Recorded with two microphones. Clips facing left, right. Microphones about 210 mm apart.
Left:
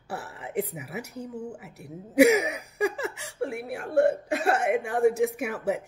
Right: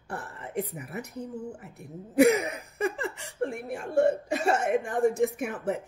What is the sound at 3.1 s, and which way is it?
Speech, 10° left (ahead or behind).